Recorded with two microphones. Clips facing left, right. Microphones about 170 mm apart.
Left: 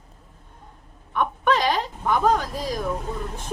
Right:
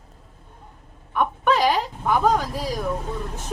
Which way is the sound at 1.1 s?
10° right (ahead or behind).